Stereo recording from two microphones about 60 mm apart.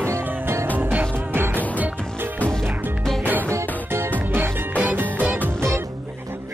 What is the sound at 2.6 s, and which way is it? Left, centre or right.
Music, right.